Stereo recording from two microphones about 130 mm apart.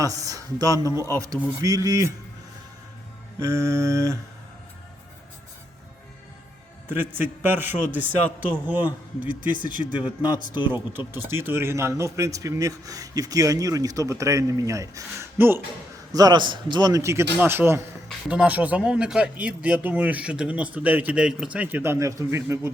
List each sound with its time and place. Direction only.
0.0 s speech: 25° right (ahead or behind)
3.4 s speech: 25° right (ahead or behind)
6.8 s a man's voice: 15° right (ahead or behind)
10.2 s speech: 35° left (ahead or behind)
10.7 s speech: 15° right (ahead or behind)
16.1 s a man's voice: 35° right (ahead or behind)